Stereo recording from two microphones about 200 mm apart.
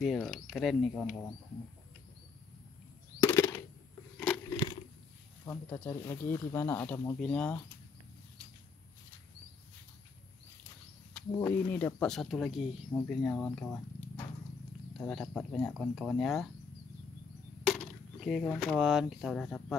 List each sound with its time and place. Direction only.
0.0 s speech: centre (ahead or behind)
3.3 s a sound: 15° left (ahead or behind)
5.4 s speech: 10° left (ahead or behind)
11.3 s speech: 10° left (ahead or behind)
17.6 s a sound: centre (ahead or behind)
18.8 s speech: 5° right (ahead or behind)